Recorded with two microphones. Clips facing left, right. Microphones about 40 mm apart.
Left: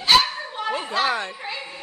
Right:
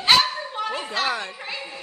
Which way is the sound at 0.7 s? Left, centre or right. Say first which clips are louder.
Left 4 dB; centre.